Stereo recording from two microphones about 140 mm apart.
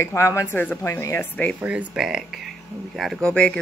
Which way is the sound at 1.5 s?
10° right (ahead or behind).